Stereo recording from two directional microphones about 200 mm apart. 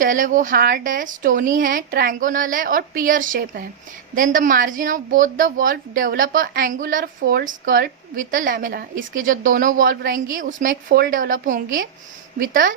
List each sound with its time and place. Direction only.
0.0 s a woman's voice: 40° right (ahead or behind)